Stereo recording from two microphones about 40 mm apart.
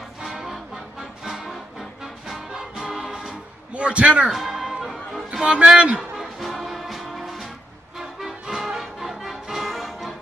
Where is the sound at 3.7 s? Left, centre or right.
Right.